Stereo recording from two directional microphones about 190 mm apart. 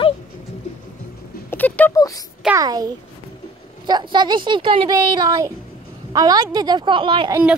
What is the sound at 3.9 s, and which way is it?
Speech, 25° right (ahead or behind).